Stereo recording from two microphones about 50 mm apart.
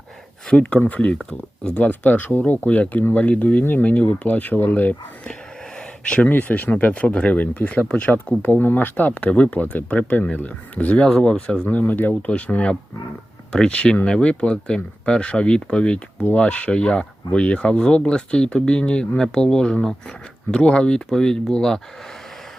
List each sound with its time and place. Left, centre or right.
0.8 s speech: left
6.2 s speech: left
11.7 s speech: left
12.3 s speech: left